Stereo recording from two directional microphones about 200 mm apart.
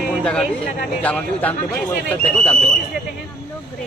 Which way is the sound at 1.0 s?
10° left (ahead or behind).